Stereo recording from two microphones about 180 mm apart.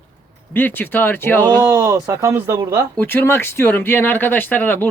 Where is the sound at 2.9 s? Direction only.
10° left (ahead or behind).